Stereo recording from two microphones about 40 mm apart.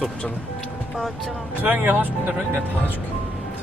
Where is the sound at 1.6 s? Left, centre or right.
Right.